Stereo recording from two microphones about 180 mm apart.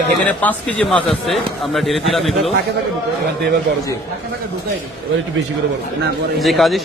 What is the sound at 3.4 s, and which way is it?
Speech, 65° right (ahead or behind).